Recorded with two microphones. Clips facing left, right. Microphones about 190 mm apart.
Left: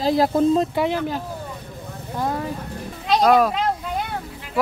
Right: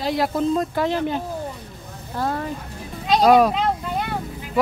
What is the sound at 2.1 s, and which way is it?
Vehicle, 10° left (ahead or behind).